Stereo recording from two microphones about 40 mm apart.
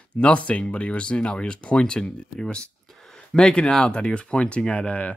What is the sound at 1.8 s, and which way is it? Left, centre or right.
Speech, centre.